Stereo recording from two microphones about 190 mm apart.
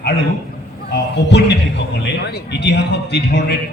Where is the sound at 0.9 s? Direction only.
65° left (ahead or behind).